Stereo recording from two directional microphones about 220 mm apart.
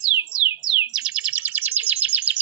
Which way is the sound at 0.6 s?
5° right (ahead or behind).